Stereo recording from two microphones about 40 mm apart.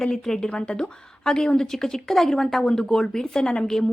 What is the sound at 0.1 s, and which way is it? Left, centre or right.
A woman's voice, centre.